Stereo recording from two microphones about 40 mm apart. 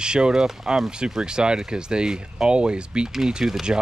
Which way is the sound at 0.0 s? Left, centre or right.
Right.